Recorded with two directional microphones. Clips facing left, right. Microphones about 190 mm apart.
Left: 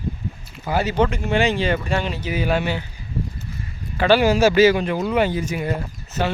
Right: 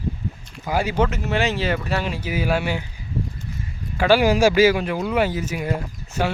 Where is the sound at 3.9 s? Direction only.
10° right (ahead or behind).